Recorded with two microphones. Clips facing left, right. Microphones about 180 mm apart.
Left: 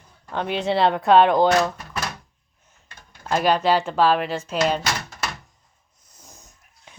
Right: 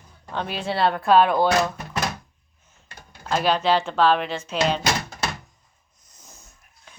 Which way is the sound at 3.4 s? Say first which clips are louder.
Left 2 dB; 10° left (ahead or behind).